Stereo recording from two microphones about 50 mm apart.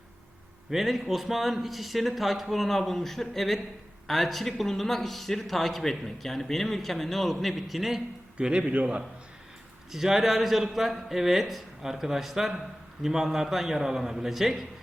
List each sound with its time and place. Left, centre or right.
0.7 s speech: centre
8.4 s a man's voice: right
9.9 s a man's voice: centre